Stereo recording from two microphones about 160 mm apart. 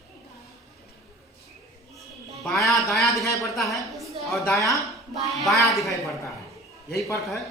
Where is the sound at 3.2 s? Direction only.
20° left (ahead or behind).